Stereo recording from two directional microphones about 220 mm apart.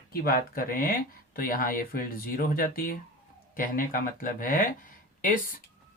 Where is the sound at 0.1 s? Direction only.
45° left (ahead or behind).